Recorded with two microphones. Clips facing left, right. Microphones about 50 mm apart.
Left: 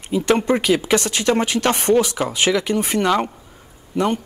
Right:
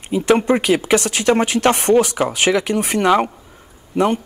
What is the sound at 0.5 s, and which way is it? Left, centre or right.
Speech, right.